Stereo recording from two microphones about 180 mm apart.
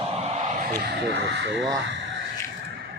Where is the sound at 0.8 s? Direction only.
70° right (ahead or behind).